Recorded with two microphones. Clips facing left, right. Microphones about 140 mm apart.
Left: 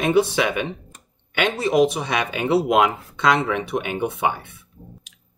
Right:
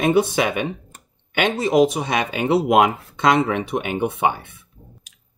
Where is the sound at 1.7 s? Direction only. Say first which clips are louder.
Right 1 dB; 45° right (ahead or behind).